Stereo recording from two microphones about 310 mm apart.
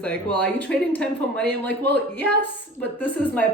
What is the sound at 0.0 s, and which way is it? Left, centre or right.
Speech, centre.